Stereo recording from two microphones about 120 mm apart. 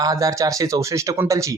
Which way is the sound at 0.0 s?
30° right (ahead or behind).